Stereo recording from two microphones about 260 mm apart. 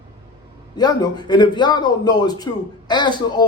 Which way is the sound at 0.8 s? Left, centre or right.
Centre.